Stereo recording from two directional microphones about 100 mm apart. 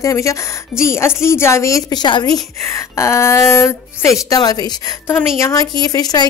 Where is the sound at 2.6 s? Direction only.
30° left (ahead or behind).